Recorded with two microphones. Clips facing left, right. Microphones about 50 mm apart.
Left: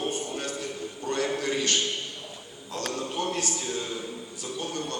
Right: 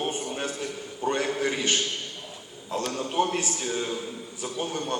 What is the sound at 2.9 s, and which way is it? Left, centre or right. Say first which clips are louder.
Speech: right 4 dB; right.